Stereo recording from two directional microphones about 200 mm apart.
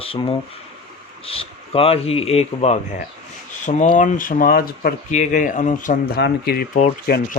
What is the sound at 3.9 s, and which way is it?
Speech, 40° left (ahead or behind).